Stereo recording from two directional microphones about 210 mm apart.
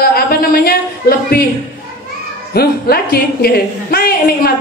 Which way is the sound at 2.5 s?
45° left (ahead or behind).